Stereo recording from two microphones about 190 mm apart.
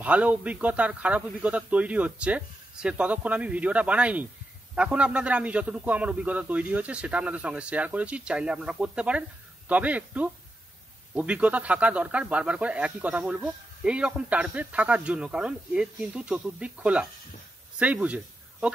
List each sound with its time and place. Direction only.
0.0 s speech: 5° right (ahead or behind)